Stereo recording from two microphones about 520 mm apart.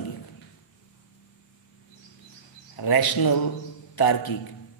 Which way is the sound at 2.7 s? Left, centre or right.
Left.